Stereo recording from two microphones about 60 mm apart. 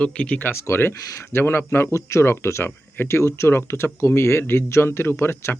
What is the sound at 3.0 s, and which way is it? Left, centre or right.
Speech, left.